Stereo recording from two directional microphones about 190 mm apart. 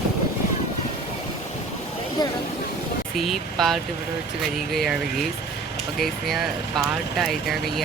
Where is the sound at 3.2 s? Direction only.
Centre (ahead or behind).